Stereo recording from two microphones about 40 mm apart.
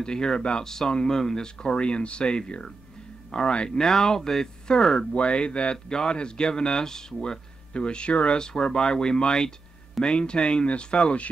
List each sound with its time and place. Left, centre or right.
0.0 s speech: centre
4.9 s speech: left